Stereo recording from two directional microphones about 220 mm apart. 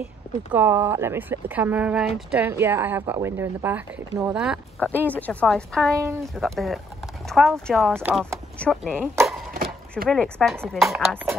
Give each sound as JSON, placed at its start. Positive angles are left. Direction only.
{"t": 0.5, "sound": "speech", "side_deg": -10}
{"t": 4.7, "sound": "speech", "side_deg": 10}
{"t": 8.9, "sound": "speech", "side_deg": -10}
{"t": 9.5, "sound": "a sound", "side_deg": -40}
{"t": 10.0, "sound": "speech", "side_deg": 0}